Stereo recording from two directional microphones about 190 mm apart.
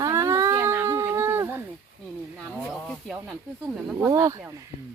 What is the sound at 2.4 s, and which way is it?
Snake, centre (ahead or behind).